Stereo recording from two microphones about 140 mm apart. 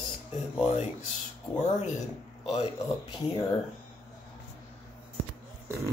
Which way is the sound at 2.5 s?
40° left (ahead or behind).